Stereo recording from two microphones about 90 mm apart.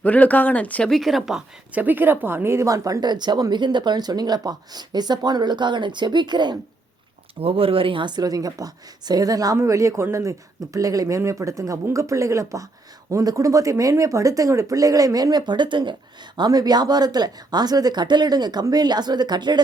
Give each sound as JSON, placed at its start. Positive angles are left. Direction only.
{"t": 0.0, "sound": "speech", "side_deg": 20}
{"t": 0.9, "sound": "speech", "side_deg": 0}
{"t": 1.7, "sound": "speech", "side_deg": -20}
{"t": 7.4, "sound": "speech", "side_deg": -90}
{"t": 16.4, "sound": "speech", "side_deg": -45}